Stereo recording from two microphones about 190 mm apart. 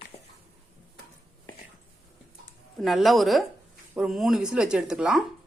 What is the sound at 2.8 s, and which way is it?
A woman's voice, centre (ahead or behind).